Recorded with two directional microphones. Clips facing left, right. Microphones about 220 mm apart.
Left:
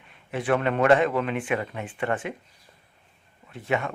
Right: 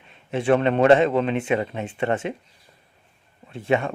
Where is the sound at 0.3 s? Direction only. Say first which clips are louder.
Right 5 dB; 25° right (ahead or behind).